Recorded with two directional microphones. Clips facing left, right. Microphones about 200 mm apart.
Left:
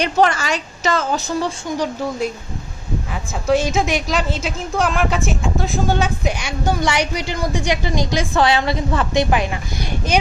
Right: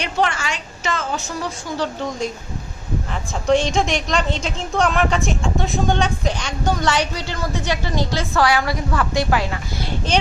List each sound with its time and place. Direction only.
0.0 s a woman's voice: 40° left (ahead or behind)
1.7 s a woman's voice: 10° left (ahead or behind)